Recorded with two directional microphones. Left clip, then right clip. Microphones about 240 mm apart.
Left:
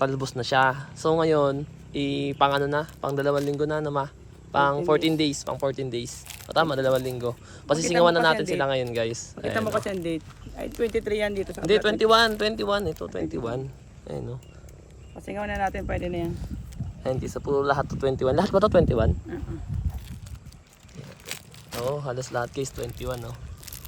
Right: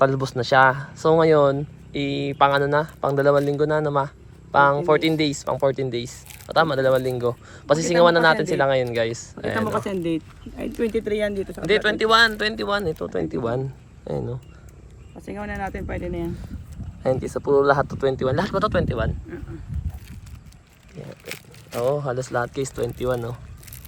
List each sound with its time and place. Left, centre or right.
0.0 s speech: centre
6.5 s speech: centre
9.8 s speech: right
10.7 s speech: centre
11.0 s speech: right
11.3 s speech: centre
11.6 s speech: centre
21.2 s a sound: left
21.8 s speech: centre